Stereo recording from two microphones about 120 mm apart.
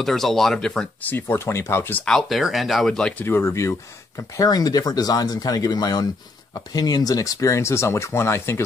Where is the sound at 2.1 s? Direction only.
Centre (ahead or behind).